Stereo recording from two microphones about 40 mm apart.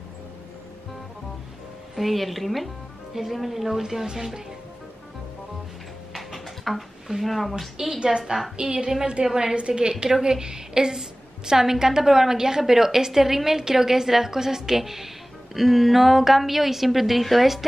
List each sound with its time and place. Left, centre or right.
2.0 s speech: centre
6.1 s a sound: centre
8.2 s a woman's voice: centre